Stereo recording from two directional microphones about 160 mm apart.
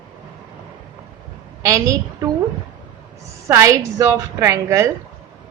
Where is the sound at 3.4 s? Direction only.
20° right (ahead or behind).